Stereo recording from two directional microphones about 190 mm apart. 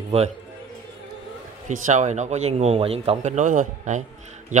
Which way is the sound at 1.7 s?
40° right (ahead or behind).